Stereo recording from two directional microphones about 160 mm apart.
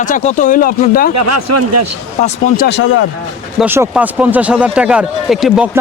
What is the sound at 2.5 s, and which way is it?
Speech, 90° left.